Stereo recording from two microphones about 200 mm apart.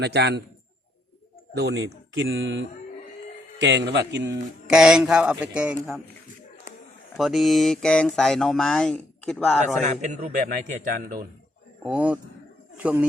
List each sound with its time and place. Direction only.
0.0 s speech: 55° right (ahead or behind)
1.5 s speech: 55° right (ahead or behind)
4.7 s speech: 5° right (ahead or behind)
7.2 s speech: centre (ahead or behind)
9.8 s speech: 35° right (ahead or behind)
11.8 s speech: 5° right (ahead or behind)